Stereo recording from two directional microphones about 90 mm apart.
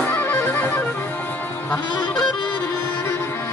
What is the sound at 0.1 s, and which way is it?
Music, 20° left (ahead or behind).